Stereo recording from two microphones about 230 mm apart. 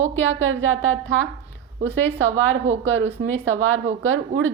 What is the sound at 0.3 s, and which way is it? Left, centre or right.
Speech, right.